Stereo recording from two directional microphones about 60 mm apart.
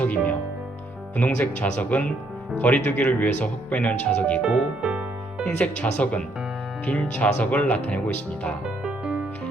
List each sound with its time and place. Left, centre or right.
0.0 s music: left
1.1 s speech: left
4.8 s music: centre
5.5 s speech: left